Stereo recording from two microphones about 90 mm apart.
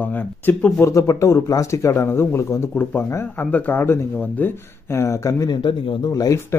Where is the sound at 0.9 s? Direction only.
35° left (ahead or behind).